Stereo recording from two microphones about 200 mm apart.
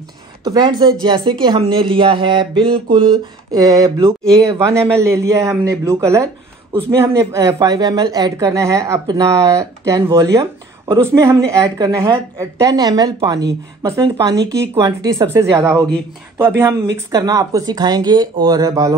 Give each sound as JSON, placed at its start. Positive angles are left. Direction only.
{"t": 0.4, "sound": "speech", "side_deg": -20}